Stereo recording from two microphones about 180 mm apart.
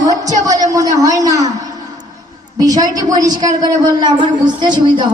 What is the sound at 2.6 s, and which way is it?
Speech, 20° right (ahead or behind).